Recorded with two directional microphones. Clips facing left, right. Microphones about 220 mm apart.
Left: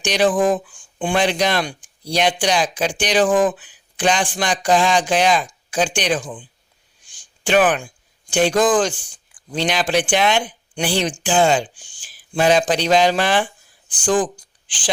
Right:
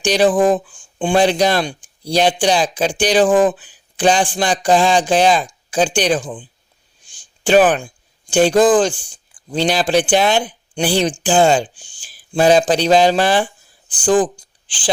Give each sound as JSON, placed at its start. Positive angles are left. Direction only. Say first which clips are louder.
{"t": 0.0, "sound": "speech", "louder": "right 3 dB", "side_deg": -30}
{"t": 7.1, "sound": "a sound", "louder": "right 5 dB", "side_deg": -30}
{"t": 8.3, "sound": "speech", "louder": "right 4 dB", "side_deg": -30}